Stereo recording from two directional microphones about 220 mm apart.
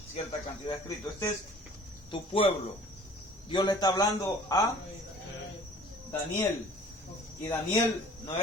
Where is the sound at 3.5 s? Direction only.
20° left (ahead or behind).